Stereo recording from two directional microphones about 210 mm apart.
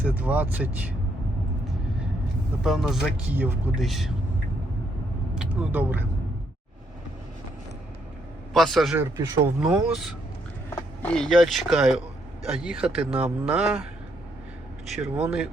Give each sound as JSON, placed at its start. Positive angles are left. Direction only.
{"t": 0.0, "sound": "speech", "side_deg": -10}
{"t": 2.6, "sound": "speech", "side_deg": 0}
{"t": 5.3, "sound": "speech", "side_deg": -5}
{"t": 8.5, "sound": "speech", "side_deg": 0}
{"t": 9.0, "sound": "speech", "side_deg": -15}
{"t": 9.6, "sound": "speech", "side_deg": -5}
{"t": 14.8, "sound": "speech", "side_deg": -5}